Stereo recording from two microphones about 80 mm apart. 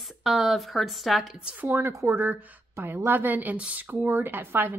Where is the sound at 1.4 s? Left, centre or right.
Centre.